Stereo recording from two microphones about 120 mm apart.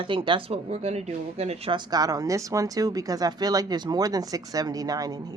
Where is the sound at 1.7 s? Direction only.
35° right (ahead or behind).